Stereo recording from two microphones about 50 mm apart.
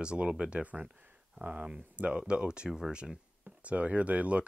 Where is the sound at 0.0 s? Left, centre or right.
Right.